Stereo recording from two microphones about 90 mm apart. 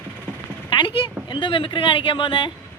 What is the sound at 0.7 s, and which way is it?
A woman's voice, 60° left (ahead or behind).